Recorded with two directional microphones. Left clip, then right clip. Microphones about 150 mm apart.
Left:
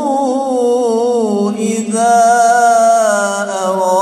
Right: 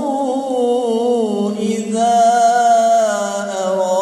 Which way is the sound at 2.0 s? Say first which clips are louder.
Left 3 dB; 30° left (ahead or behind).